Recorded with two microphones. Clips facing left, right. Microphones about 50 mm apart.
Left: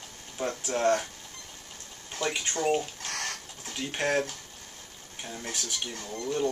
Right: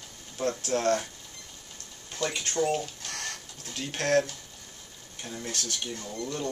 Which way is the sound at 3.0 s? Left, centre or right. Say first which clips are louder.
Left 3 dB; left.